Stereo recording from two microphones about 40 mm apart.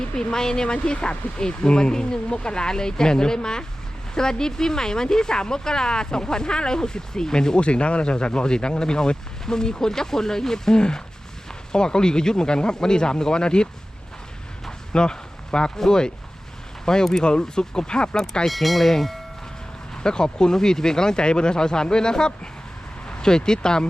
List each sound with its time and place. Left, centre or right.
0.0 s speech: centre
14.9 s a sound: left
15.8 s speech: centre
18.4 s speech: centre
19.9 s speech: centre